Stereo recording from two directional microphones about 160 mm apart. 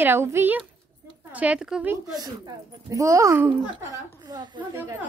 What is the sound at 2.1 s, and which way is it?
Speech, 25° right (ahead or behind).